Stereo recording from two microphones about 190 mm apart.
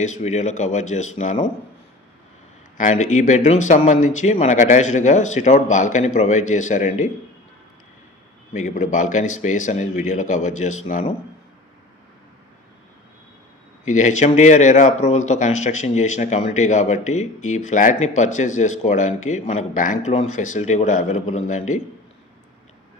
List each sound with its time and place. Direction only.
0.0 s speech: 40° left (ahead or behind)
2.7 s speech: 40° left (ahead or behind)
8.5 s speech: 40° left (ahead or behind)
13.8 s speech: 40° left (ahead or behind)